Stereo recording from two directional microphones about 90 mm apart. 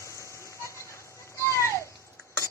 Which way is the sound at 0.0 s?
35° left (ahead or behind).